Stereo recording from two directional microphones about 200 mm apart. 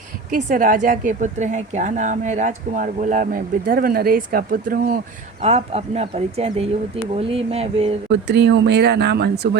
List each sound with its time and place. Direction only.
0.3 s a woman's voice: 40° right (ahead or behind)
5.4 s a woman's voice: 30° right (ahead or behind)
8.1 s speech: 60° right (ahead or behind)